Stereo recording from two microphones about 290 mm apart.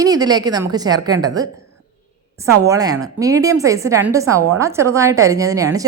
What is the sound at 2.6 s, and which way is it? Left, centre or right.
A woman's voice, centre.